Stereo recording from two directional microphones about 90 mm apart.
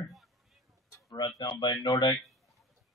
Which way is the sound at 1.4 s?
55° left (ahead or behind).